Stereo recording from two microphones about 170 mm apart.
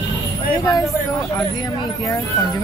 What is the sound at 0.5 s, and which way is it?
Speech, 10° left (ahead or behind).